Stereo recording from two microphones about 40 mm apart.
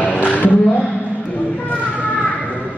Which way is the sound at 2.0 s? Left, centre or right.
Left.